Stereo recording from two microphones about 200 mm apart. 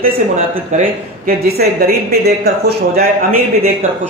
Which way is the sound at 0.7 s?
40° right (ahead or behind).